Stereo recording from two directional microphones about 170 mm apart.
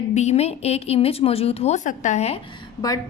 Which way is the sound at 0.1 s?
40° left (ahead or behind).